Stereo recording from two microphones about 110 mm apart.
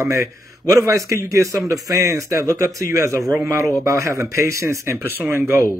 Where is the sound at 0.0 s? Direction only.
30° right (ahead or behind).